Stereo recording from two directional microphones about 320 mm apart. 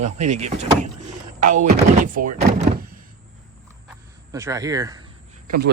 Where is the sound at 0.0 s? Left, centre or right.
Right.